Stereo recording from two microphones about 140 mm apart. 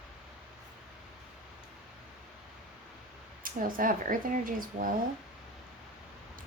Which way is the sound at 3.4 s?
85° right.